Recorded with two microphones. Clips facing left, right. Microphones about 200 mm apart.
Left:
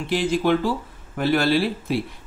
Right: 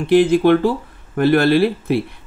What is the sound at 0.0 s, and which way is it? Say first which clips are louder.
Speech: right 9 dB; 55° right (ahead or behind).